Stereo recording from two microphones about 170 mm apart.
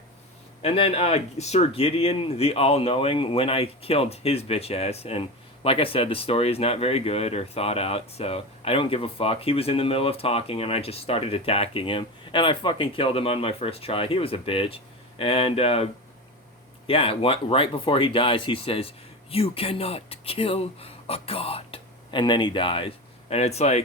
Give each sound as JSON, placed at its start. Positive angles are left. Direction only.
{"t": 0.6, "sound": "speech", "side_deg": 35}